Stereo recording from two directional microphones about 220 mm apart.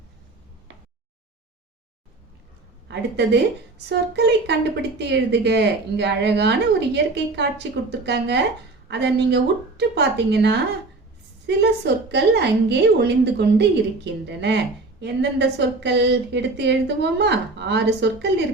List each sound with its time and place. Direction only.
2.9 s a woman's voice: 50° right (ahead or behind)
12.1 s a woman's voice: 50° right (ahead or behind)